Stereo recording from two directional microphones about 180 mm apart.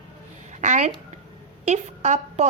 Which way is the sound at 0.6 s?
40° right (ahead or behind).